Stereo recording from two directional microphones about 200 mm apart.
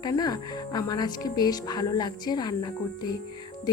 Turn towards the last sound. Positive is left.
turn(degrees=20)  # may be behind; listen again after turning